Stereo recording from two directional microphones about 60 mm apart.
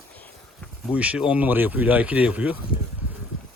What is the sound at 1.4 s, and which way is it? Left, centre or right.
A man's voice, right.